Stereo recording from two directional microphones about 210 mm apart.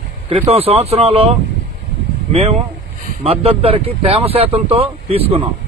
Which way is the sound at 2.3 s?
30° right (ahead or behind).